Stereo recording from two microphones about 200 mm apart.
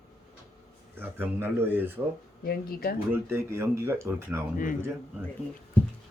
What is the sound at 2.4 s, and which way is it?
Speech, 50° left (ahead or behind).